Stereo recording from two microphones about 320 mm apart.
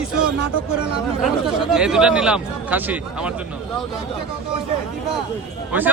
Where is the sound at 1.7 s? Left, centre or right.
Centre.